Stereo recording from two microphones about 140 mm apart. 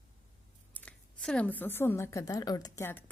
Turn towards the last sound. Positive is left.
turn(degrees=15)  # may be behind; listen again after turning